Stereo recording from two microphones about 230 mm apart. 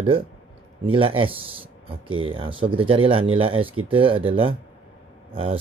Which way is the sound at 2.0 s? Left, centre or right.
Right.